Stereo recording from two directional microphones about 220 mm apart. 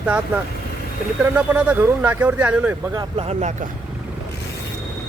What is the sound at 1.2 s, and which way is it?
Speech, 5° right (ahead or behind).